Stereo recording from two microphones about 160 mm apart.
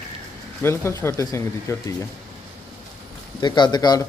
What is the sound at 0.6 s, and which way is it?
Speech, 15° left (ahead or behind).